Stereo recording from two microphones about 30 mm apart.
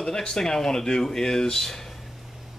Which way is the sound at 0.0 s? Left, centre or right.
Left.